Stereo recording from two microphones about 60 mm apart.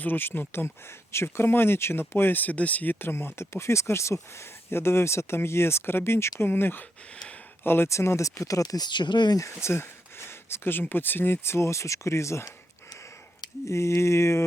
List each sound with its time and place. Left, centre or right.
0.0 s speech: left
7.9 s speech: left
9.6 s speech: left
13.7 s speech: left